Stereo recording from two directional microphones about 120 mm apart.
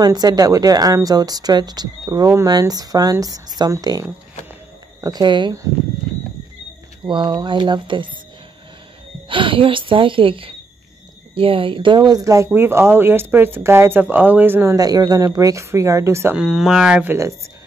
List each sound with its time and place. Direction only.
0.0 s speech: 35° right (ahead or behind)
7.1 s speech: 40° right (ahead or behind)
9.3 s a woman's voice: 45° right (ahead or behind); by 14.8 s 20° right (ahead or behind)
14.8 s speech: 30° right (ahead or behind)
16.3 s speech: 5° right (ahead or behind)